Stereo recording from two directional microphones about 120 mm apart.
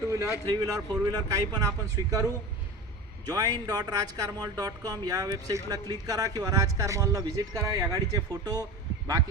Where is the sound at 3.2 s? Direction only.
30° right (ahead or behind).